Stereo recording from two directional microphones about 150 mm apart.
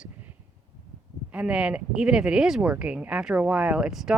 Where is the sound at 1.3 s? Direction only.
5° right (ahead or behind).